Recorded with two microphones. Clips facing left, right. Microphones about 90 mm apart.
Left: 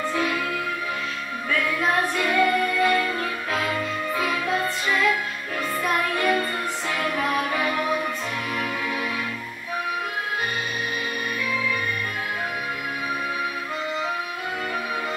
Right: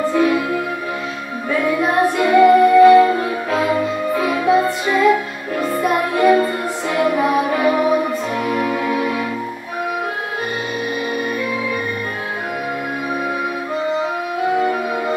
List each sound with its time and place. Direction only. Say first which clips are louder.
0.1 s music: right 11 dB; 20° right (ahead or behind)
1.5 s music: right 6 dB; 20° right (ahead or behind)